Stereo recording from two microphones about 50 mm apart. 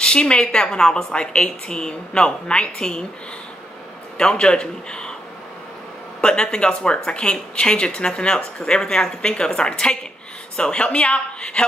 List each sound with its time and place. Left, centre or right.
0.0 s speech: centre
4.2 s speech: centre
6.2 s a woman's voice: centre